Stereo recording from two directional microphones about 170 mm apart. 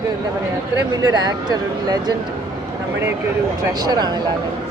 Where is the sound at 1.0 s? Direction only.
25° right (ahead or behind).